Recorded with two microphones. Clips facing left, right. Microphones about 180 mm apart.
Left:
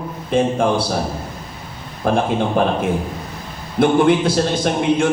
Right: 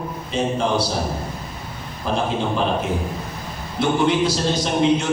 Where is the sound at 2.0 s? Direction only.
55° left (ahead or behind).